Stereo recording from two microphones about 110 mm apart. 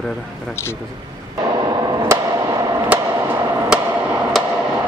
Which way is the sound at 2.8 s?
20° right (ahead or behind).